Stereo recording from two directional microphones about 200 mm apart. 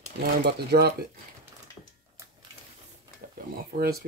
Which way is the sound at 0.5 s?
50° right (ahead or behind).